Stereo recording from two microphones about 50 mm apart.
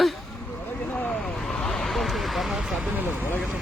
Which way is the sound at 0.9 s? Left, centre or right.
Left.